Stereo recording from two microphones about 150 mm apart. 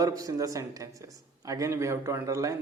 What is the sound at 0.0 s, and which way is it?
Speech, 25° right (ahead or behind).